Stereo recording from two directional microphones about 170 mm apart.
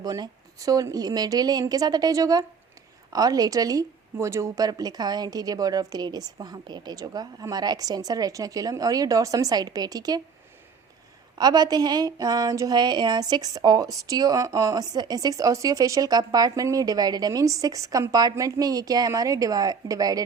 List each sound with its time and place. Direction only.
0.0 s speech: 20° right (ahead or behind)
11.3 s speech: 25° right (ahead or behind)